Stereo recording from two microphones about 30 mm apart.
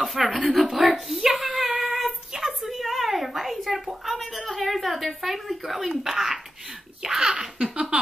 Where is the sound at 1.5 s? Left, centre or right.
Centre.